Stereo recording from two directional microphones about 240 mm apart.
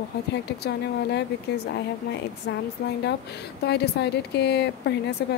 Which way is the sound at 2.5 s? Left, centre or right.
Left.